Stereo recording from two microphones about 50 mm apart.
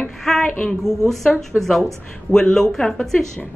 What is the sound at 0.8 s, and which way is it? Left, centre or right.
A woman's voice, centre.